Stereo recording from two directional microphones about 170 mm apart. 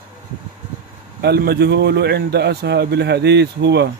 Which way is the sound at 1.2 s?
70° right (ahead or behind).